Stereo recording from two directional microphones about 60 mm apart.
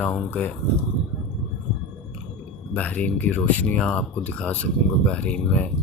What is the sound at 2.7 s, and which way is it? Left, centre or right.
Speech, left.